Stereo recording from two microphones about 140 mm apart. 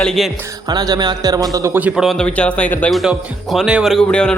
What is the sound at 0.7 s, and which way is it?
A man's voice, 30° right (ahead or behind).